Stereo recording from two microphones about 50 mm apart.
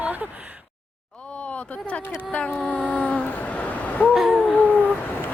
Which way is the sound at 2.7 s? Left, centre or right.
Left.